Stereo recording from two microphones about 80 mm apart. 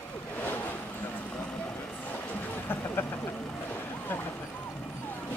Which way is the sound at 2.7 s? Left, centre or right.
Left.